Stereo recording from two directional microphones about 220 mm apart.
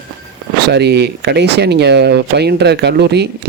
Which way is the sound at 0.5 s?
50° right (ahead or behind).